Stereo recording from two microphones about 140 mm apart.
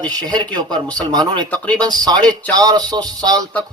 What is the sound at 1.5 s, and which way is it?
Speech, 10° left (ahead or behind).